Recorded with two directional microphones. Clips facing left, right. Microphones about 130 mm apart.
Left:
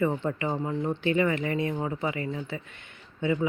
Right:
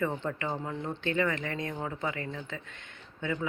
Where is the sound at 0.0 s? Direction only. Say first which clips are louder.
Left 5 dB; 10° left (ahead or behind).